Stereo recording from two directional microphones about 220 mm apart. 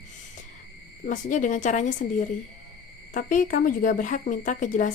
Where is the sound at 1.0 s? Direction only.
35° left (ahead or behind).